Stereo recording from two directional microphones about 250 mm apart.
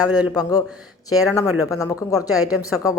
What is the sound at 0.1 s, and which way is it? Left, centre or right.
Speech, centre.